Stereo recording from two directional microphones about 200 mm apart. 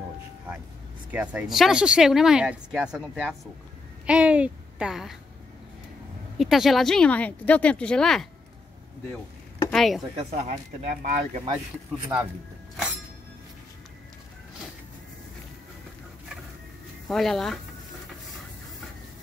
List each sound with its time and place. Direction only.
1.1 s a woman's voice: 5° right (ahead or behind)
6.3 s speech: centre (ahead or behind)
9.7 s speech: centre (ahead or behind)
10.1 s speech: 35° right (ahead or behind)
17.1 s speech: centre (ahead or behind)